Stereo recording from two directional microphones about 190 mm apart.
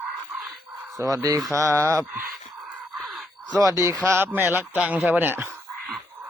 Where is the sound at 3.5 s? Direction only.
15° right (ahead or behind).